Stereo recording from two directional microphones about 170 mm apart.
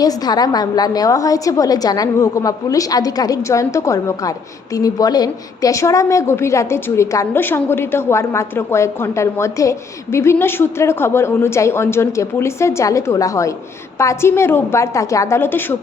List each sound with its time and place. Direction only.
0.0 s a woman's voice: 20° left (ahead or behind)